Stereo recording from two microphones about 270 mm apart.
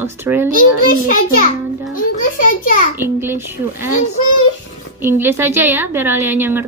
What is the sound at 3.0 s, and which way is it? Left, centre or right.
Speech, centre.